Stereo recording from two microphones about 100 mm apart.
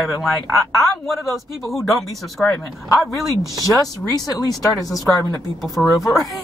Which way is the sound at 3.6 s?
35° left (ahead or behind).